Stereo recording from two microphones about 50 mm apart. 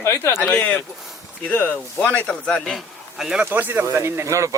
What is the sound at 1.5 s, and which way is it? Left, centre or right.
Speech, left.